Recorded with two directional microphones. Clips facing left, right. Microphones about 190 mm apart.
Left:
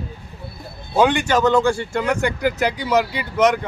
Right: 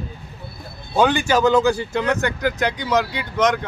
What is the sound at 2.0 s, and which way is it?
Speech, 10° left (ahead or behind).